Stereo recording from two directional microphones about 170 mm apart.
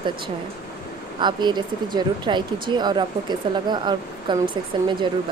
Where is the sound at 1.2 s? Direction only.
25° right (ahead or behind).